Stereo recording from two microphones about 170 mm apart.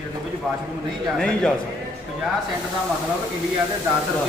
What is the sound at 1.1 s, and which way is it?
Speech, 5° left (ahead or behind).